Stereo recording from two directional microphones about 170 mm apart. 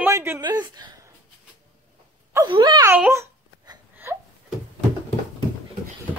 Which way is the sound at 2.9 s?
15° right (ahead or behind).